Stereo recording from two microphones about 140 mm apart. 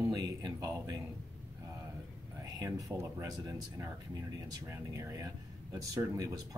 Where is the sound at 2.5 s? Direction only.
25° right (ahead or behind).